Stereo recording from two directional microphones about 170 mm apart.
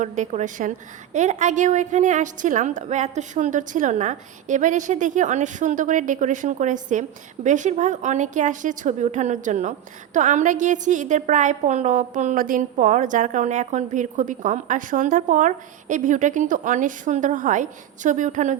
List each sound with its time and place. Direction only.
0.0 s a woman's voice: 45° right (ahead or behind)